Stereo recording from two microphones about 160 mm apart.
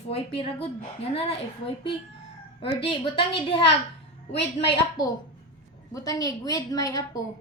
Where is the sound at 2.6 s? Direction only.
35° left (ahead or behind).